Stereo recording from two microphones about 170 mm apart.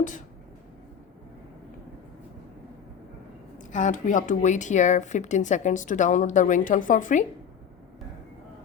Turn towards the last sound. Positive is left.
turn(degrees=50)  # may be behind; listen again after turning